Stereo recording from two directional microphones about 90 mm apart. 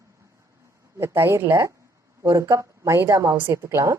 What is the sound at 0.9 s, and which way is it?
Speech, 30° right (ahead or behind).